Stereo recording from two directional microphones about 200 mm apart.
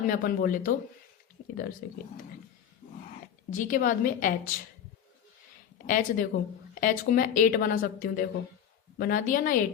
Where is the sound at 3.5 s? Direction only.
40° left (ahead or behind).